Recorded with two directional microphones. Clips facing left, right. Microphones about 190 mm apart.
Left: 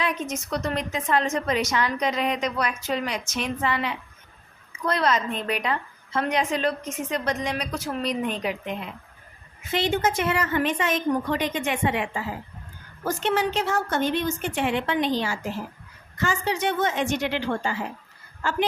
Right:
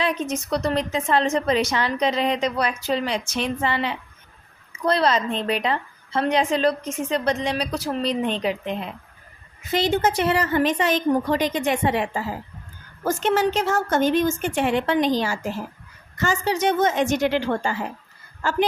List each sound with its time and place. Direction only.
0.0 s a woman's voice: 30° right (ahead or behind)